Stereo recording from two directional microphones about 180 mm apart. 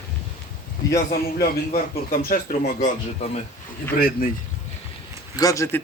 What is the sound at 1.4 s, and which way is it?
A man's voice, 55° left (ahead or behind).